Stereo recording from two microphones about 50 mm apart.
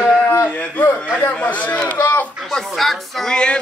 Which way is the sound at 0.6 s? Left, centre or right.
Left.